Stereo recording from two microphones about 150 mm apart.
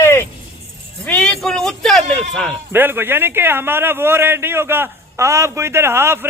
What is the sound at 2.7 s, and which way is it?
A man's voice, 15° right (ahead or behind).